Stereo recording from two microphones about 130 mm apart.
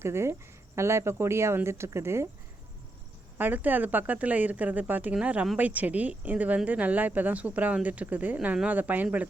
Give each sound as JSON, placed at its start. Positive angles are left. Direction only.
{"t": 0.0, "sound": "speech", "side_deg": -20}
{"t": 3.3, "sound": "speech", "side_deg": -15}